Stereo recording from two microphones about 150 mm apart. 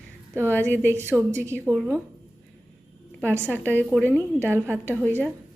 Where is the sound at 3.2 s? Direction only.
15° right (ahead or behind).